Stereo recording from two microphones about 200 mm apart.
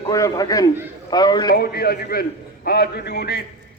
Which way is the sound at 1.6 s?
50° left (ahead or behind).